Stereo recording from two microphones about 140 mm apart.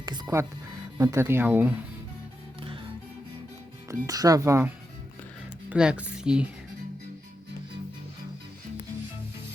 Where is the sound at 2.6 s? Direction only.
40° right (ahead or behind).